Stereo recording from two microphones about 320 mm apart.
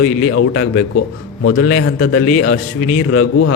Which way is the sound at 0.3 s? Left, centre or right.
Left.